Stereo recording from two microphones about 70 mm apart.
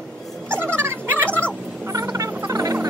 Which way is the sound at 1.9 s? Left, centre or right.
Right.